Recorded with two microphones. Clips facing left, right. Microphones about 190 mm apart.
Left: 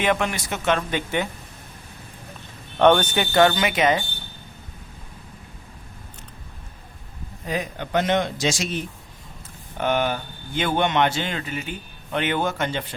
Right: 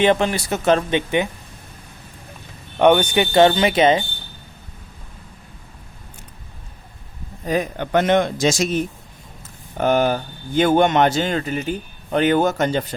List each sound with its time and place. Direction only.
0.0 s speech: 30° right (ahead or behind)
0.9 s speech: 20° right (ahead or behind)
2.7 s speech: 10° right (ahead or behind)
3.3 s speech: 25° right (ahead or behind)
7.4 s speech: 45° right (ahead or behind)